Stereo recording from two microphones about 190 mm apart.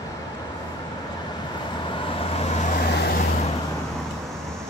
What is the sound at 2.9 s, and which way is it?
Vehicle, 60° left (ahead or behind).